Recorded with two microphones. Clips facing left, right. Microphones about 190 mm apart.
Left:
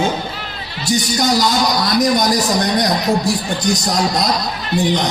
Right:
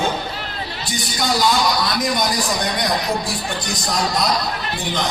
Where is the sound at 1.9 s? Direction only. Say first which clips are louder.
Left 6 dB; 45° left (ahead or behind).